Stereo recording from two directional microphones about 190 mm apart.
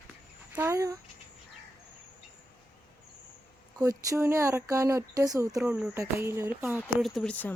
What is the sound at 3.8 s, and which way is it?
Speech, 15° right (ahead or behind).